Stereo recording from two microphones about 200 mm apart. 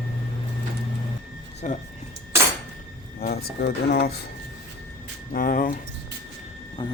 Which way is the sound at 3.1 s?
50° left (ahead or behind).